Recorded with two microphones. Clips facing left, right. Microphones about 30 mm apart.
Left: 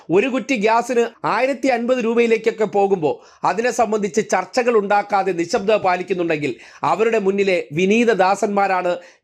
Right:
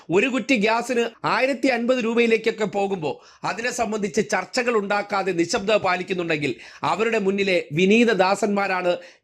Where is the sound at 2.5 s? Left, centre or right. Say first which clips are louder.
Left 7 dB; right.